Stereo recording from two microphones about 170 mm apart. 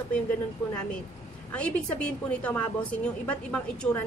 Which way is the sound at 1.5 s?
5° left (ahead or behind).